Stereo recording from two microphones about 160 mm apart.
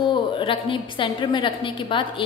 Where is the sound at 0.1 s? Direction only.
30° left (ahead or behind).